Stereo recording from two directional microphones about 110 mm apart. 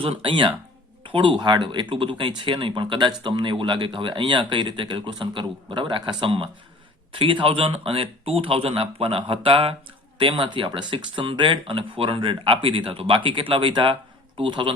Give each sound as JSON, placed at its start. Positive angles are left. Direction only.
{"t": 0.0, "sound": "speech", "side_deg": -55}